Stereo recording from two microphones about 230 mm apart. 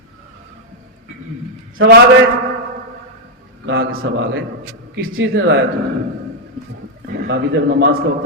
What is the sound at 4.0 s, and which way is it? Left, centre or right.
A man's voice, right.